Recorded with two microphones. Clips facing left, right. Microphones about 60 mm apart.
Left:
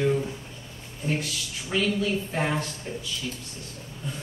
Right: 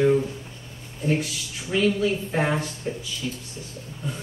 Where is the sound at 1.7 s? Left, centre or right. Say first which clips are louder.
Right 4 dB; centre.